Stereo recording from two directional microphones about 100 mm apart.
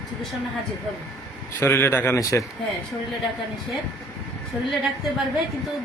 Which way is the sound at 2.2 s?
35° left (ahead or behind).